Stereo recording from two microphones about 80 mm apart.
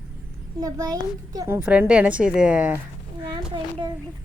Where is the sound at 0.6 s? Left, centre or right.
Right.